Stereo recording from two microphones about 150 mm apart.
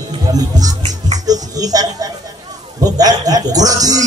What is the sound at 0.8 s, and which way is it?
Music, 50° right (ahead or behind).